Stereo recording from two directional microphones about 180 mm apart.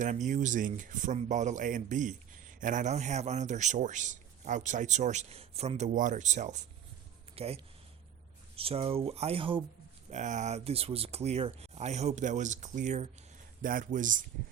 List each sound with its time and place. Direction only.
0.0 s speech: 45° right (ahead or behind)
7.3 s a sound: 30° right (ahead or behind)
8.5 s speech: 30° right (ahead or behind)
10.1 s speech: 45° right (ahead or behind)